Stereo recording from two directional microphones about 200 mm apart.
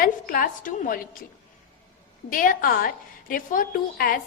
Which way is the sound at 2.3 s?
45° left (ahead or behind).